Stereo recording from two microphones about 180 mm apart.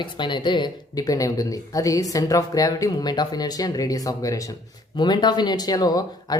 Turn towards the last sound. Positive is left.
turn(degrees=20)  # may be behind; listen again after turning